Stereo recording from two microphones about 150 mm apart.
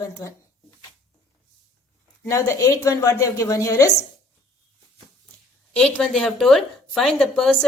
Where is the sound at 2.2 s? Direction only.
20° left (ahead or behind).